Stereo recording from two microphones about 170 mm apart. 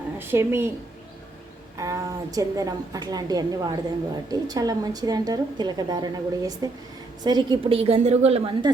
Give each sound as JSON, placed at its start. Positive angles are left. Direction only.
{"t": 0.2, "sound": "speech", "side_deg": -15}
{"t": 1.8, "sound": "a woman's voice", "side_deg": -20}